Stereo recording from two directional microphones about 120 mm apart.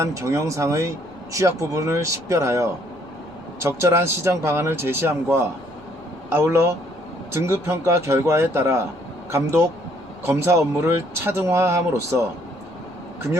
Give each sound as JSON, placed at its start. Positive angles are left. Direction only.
{"t": 0.0, "sound": "speech", "side_deg": -25}